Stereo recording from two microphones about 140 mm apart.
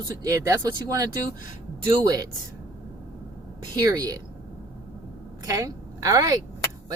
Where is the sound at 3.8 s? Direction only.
25° right (ahead or behind).